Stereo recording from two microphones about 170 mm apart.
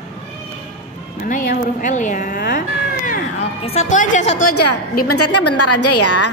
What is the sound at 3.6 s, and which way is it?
Speech, 40° left (ahead or behind).